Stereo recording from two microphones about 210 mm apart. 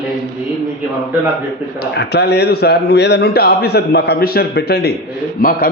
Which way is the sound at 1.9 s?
50° left (ahead or behind).